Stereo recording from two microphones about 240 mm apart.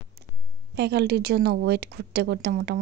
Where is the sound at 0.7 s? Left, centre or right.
Right.